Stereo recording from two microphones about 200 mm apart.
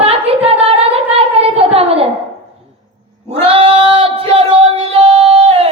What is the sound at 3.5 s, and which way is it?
Music, 25° right (ahead or behind).